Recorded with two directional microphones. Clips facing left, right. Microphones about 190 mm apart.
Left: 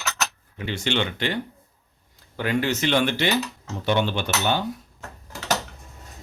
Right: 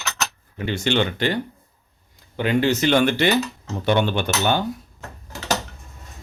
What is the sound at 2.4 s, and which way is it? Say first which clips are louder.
Speech: right 4 dB; 25° right (ahead or behind).